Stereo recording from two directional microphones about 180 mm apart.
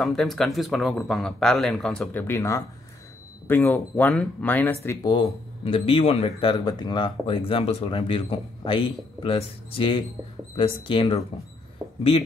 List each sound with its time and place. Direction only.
0.0 s speech: centre (ahead or behind)
5.0 s speech: 25° left (ahead or behind)
11.8 s a sound: 10° right (ahead or behind)